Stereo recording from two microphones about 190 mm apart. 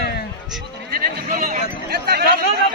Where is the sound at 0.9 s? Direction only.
45° right (ahead or behind).